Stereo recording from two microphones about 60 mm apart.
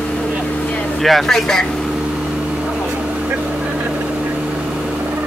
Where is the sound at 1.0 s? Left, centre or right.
Centre.